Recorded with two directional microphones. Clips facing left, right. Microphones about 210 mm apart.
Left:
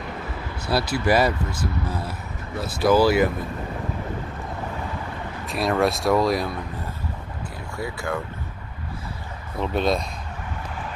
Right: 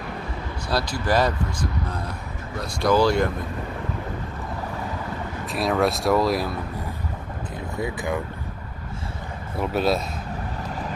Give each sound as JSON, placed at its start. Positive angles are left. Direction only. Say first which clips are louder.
{"t": 0.7, "sound": "speech", "louder": "left 3 dB", "side_deg": 5}
{"t": 5.5, "sound": "speech", "louder": "even", "side_deg": 0}
{"t": 7.7, "sound": "speech", "louder": "right 2 dB", "side_deg": -20}
{"t": 9.6, "sound": "speech", "louder": "even", "side_deg": -5}